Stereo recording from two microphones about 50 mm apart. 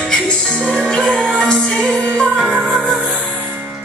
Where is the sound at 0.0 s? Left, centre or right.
Centre.